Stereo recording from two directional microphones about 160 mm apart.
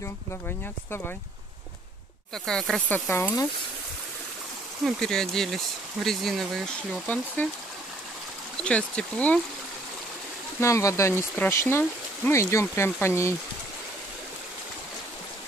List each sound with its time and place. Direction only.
2.3 s speech: 5° left (ahead or behind)
3.1 s speech: 15° left (ahead or behind)
4.8 s speech: 5° left (ahead or behind)
8.6 s speech: 5° left (ahead or behind)
10.6 s speech: 20° left (ahead or behind)